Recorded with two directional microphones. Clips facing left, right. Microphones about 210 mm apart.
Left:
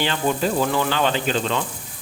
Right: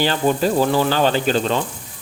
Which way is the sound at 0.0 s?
40° right (ahead or behind).